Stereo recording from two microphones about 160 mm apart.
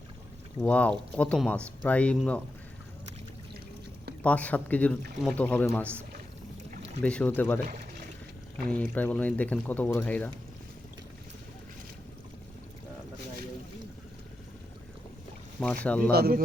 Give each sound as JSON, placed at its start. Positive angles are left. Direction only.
{"t": 0.6, "sound": "speech", "side_deg": 10}
{"t": 4.2, "sound": "speech", "side_deg": 10}
{"t": 7.0, "sound": "speech", "side_deg": 5}
{"t": 8.7, "sound": "speech", "side_deg": 10}
{"t": 15.6, "sound": "speech", "side_deg": 10}
{"t": 16.1, "sound": "speech", "side_deg": -75}